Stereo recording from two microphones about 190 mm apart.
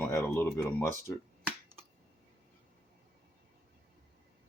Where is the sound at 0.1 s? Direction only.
15° left (ahead or behind).